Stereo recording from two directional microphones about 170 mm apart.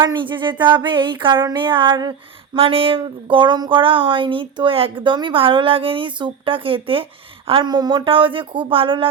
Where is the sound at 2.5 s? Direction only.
35° right (ahead or behind).